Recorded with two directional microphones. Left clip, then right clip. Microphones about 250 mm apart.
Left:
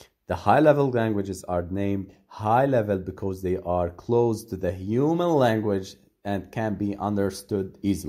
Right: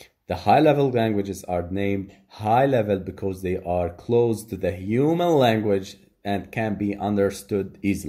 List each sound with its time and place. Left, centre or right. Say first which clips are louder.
0.3 s speech: right 1 dB; left